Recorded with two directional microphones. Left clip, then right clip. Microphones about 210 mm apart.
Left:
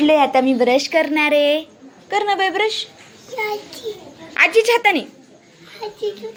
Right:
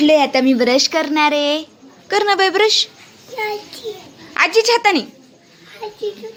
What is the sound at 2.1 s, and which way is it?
Speech, 40° right (ahead or behind).